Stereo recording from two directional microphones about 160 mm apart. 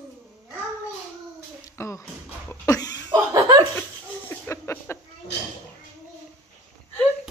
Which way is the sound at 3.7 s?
15° left (ahead or behind).